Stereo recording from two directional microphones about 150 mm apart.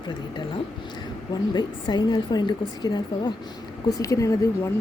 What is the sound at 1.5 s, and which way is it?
A woman's voice, 30° left (ahead or behind).